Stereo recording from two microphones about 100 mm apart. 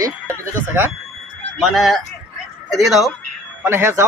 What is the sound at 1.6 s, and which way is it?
Speech, centre (ahead or behind).